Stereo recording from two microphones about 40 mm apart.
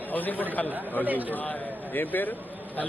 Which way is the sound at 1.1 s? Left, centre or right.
Right.